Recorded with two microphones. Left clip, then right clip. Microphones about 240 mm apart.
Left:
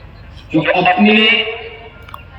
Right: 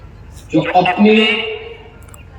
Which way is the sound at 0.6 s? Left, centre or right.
Centre.